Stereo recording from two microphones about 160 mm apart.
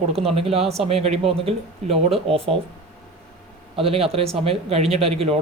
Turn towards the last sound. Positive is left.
turn(degrees=-40)  # may be behind; listen again after turning